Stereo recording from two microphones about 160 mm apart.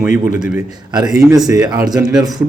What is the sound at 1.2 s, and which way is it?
Speech, 20° right (ahead or behind).